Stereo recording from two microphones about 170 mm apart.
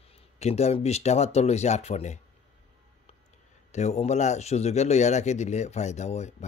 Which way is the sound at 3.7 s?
40° left (ahead or behind).